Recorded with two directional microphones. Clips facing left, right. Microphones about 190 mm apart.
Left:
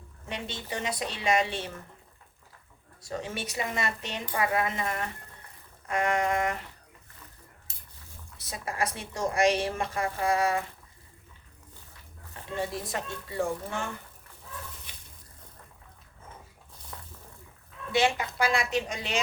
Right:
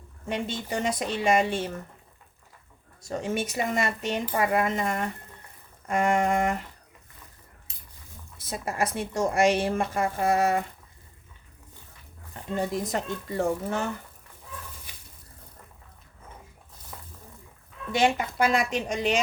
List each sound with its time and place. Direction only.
0.3 s a woman's voice: 45° right (ahead or behind)
3.0 s a woman's voice: 45° right (ahead or behind)
8.4 s a woman's voice: 50° right (ahead or behind)
12.5 s a woman's voice: 45° right (ahead or behind)
17.9 s a woman's voice: 45° right (ahead or behind)